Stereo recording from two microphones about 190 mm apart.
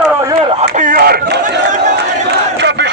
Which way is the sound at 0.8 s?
50° right (ahead or behind).